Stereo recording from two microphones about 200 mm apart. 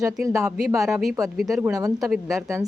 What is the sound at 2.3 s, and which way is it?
Speech, 15° right (ahead or behind).